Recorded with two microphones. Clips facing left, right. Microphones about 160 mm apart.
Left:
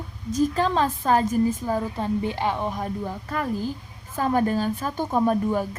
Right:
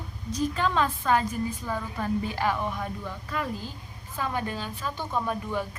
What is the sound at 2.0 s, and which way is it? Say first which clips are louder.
A woman's voice: right 2 dB; 25° left (ahead or behind).